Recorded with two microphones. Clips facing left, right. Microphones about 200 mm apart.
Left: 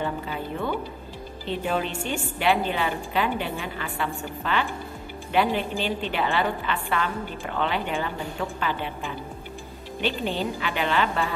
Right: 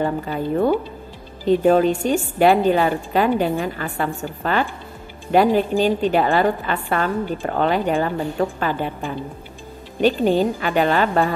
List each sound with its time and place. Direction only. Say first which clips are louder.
0.0 s a woman's voice: right 7 dB; 45° right (ahead or behind)